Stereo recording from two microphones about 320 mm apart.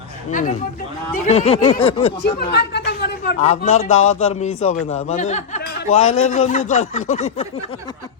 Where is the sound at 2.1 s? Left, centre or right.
Left; by 8.1 s centre.